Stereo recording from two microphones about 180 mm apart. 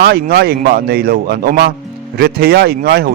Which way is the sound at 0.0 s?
60° right (ahead or behind).